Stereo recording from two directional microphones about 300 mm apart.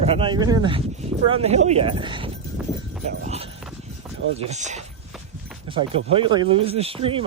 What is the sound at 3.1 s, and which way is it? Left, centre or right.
Clip-clop, right.